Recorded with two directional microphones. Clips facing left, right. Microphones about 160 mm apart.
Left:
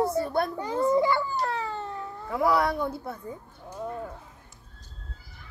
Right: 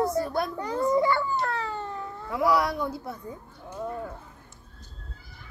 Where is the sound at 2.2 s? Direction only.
50° left (ahead or behind).